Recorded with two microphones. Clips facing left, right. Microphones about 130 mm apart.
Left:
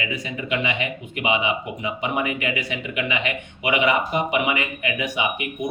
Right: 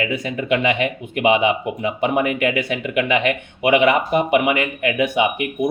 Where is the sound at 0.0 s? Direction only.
50° right (ahead or behind).